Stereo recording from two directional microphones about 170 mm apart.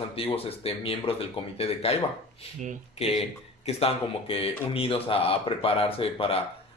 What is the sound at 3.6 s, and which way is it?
A man's voice, 35° left (ahead or behind).